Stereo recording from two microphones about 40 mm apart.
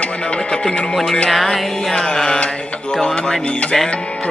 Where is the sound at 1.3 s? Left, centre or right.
Centre; by 3.7 s left.